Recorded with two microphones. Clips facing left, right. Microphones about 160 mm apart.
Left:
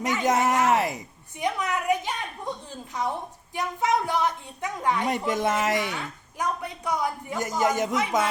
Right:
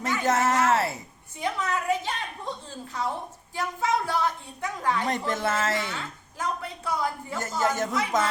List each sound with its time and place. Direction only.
0.0 s a woman's voice: 15° left (ahead or behind)